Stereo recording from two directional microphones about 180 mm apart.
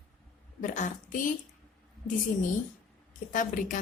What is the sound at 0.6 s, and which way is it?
Speech, 45° left (ahead or behind).